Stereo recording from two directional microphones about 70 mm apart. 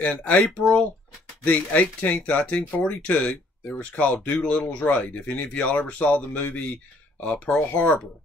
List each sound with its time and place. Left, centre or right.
0.0 s speech: left